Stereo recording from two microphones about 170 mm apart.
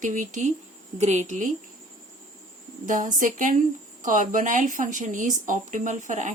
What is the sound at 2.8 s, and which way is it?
Speech, 50° right (ahead or behind).